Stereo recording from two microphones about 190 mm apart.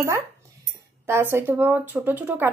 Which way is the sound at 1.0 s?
15° right (ahead or behind).